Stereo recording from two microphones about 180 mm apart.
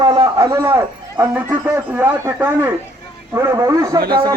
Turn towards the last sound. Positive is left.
turn(degrees=-60)  # may be behind; listen again after turning